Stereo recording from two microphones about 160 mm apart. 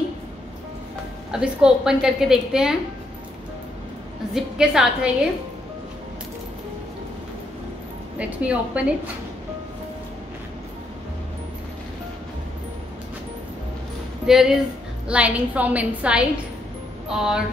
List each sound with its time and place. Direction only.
1.3 s a woman's voice: 5° right (ahead or behind)
4.3 s a woman's voice: 5° right (ahead or behind)
8.2 s a woman's voice: 10° right (ahead or behind)
14.2 s a woman's voice: 5° right (ahead or behind)